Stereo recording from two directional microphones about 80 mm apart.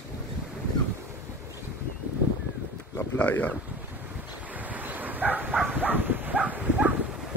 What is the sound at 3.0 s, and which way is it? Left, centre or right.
Speech, centre.